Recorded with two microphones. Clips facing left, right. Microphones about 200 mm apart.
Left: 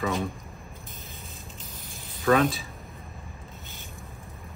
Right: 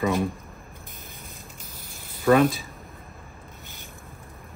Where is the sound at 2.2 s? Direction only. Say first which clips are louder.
Right 3 dB; 5° right (ahead or behind).